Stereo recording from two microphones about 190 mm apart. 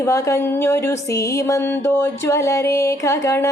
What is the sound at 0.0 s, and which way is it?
Music, 15° left (ahead or behind).